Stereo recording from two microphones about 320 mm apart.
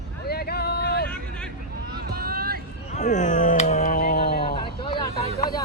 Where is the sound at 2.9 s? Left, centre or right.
Left.